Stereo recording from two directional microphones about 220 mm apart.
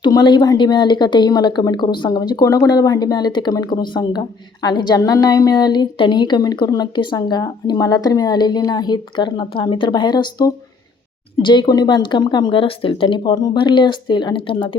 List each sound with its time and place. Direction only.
0.0 s a woman's voice: 20° left (ahead or behind)